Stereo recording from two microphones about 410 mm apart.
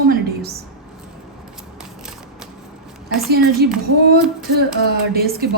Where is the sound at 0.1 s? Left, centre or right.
Right.